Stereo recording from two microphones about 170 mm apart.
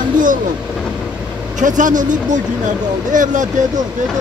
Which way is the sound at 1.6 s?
50° right (ahead or behind).